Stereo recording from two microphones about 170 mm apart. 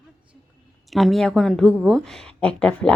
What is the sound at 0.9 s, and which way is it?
A woman's voice, centre (ahead or behind).